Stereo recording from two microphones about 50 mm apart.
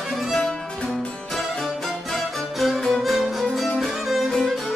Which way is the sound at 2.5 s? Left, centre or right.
Centre.